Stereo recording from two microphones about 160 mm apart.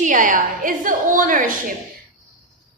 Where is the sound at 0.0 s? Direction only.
55° right (ahead or behind).